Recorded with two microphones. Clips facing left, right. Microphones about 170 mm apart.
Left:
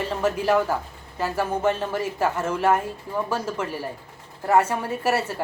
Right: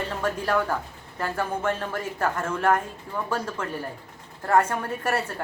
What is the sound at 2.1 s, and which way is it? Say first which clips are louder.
Speech: even; 10° left (ahead or behind).